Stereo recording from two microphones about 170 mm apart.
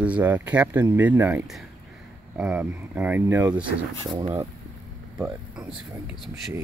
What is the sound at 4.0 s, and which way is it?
Speech, 25° right (ahead or behind).